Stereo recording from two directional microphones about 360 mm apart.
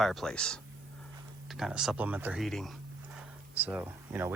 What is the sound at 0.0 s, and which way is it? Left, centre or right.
Speech, centre.